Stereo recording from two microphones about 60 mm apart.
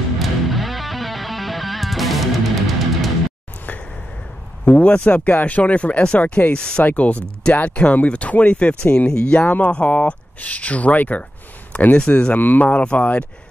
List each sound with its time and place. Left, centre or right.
0.2 s music: centre
4.6 s speech: left